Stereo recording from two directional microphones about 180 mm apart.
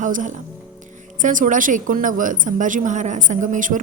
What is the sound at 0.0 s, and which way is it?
A woman's voice, 45° right (ahead or behind).